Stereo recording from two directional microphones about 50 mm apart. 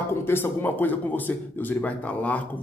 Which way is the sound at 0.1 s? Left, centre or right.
Left.